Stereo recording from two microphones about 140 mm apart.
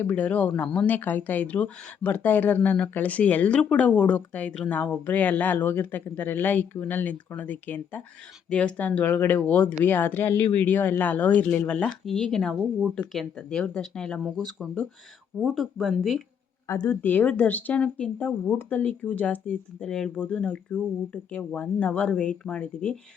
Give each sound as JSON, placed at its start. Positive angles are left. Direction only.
{"t": 0.0, "sound": "speech", "side_deg": 10}
{"t": 16.6, "sound": "speech", "side_deg": 25}
{"t": 17.0, "sound": "speech", "side_deg": 10}